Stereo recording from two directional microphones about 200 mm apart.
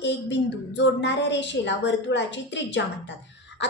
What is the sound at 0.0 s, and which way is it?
A woman's voice, 60° left (ahead or behind).